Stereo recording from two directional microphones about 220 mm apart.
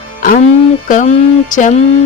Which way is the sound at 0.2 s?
35° left (ahead or behind).